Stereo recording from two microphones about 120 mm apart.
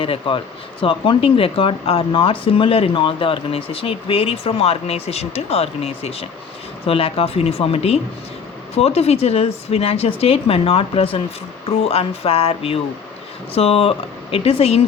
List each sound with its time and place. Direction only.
0.0 s speech: 50° left (ahead or behind)